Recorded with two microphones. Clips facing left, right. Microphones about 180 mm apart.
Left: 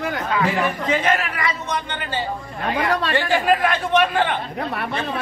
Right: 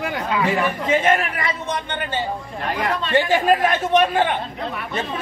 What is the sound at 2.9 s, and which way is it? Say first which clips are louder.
Speech: left 2 dB; 70° left (ahead or behind).